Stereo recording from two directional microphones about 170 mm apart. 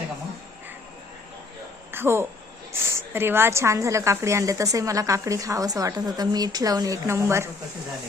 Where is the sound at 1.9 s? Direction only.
15° right (ahead or behind).